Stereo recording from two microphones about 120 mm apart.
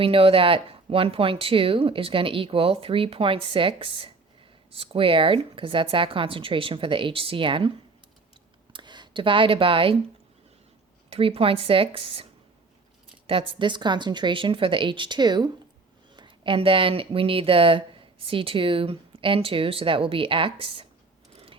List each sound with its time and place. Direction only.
0.0 s speech: 50° right (ahead or behind)
8.7 s speech: 40° right (ahead or behind)
11.1 s speech: 55° right (ahead or behind)